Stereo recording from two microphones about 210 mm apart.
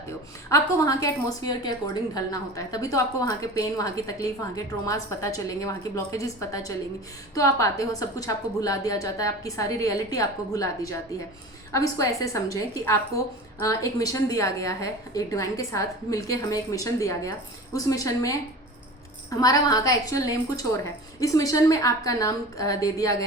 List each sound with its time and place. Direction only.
0.5 s a woman's voice: 15° left (ahead or behind)
19.4 s a woman's voice: 15° left (ahead or behind)